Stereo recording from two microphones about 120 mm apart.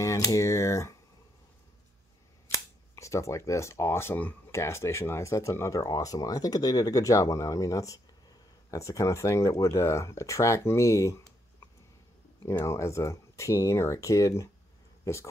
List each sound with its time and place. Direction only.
0.0 s speech: 25° left (ahead or behind)
3.0 s speech: 25° left (ahead or behind)
12.6 s speech: 25° left (ahead or behind)